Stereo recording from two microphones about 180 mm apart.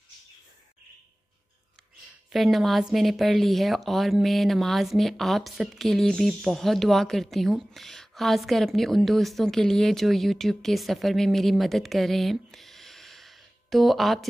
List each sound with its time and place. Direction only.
2.3 s a woman's voice: centre (ahead or behind)